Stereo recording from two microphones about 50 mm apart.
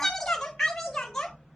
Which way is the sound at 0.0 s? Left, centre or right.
Centre.